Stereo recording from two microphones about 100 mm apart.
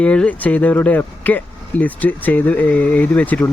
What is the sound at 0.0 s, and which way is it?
Speech, 10° left (ahead or behind).